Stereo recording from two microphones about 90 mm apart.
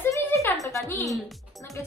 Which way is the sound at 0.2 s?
25° left (ahead or behind).